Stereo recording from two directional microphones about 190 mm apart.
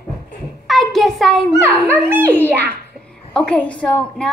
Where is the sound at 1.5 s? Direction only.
15° right (ahead or behind).